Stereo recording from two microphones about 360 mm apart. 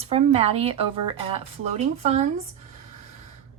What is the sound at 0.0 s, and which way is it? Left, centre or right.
Speech, centre.